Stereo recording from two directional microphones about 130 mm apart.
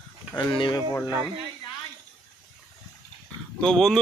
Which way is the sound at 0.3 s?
40° left (ahead or behind).